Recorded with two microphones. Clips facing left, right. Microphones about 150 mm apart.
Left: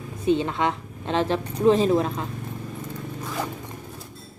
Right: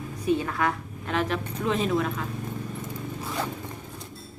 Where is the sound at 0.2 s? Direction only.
25° left (ahead or behind).